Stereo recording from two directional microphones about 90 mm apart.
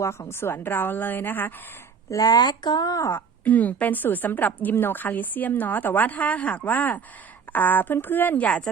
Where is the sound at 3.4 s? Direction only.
20° left (ahead or behind).